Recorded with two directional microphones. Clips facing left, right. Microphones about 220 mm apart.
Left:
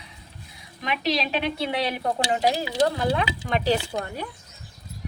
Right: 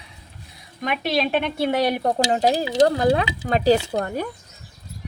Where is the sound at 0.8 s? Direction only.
50° right (ahead or behind).